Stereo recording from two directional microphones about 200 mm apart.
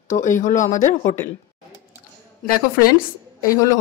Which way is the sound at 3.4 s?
15° left (ahead or behind).